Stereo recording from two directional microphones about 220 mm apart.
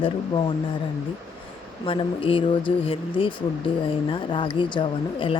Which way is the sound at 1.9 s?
25° left (ahead or behind).